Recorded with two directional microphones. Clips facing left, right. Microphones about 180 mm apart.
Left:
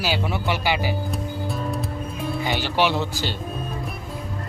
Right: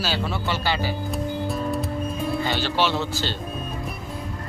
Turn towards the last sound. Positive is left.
turn(degrees=15)  # may be behind; listen again after turning